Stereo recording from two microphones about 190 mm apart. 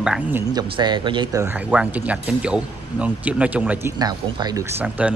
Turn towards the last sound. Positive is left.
turn(degrees=-10)  # may be behind; listen again after turning